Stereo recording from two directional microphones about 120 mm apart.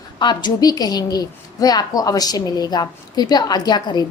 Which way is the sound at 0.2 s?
40° left (ahead or behind).